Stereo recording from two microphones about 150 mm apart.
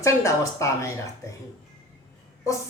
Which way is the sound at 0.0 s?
20° left (ahead or behind).